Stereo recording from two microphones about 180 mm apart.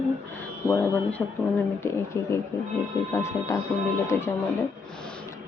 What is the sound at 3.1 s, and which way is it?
Speech, 15° left (ahead or behind).